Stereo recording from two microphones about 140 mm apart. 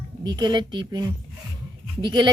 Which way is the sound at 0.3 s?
30° right (ahead or behind).